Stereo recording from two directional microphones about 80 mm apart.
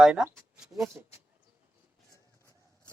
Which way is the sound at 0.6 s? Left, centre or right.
Centre.